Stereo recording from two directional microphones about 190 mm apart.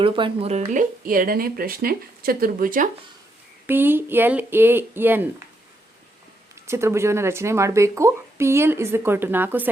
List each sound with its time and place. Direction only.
0.0 s speech: 25° right (ahead or behind); by 2.9 s 45° right (ahead or behind)
3.7 s speech: 10° right (ahead or behind)
6.7 s speech: 15° right (ahead or behind)